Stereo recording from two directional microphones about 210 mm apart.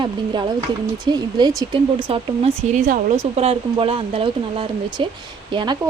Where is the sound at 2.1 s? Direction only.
30° right (ahead or behind).